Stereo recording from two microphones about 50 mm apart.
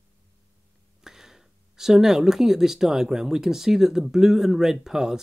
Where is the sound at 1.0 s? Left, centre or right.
Centre.